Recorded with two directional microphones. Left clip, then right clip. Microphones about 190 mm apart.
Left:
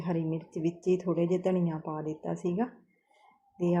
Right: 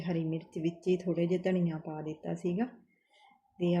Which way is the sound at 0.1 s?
5° right (ahead or behind).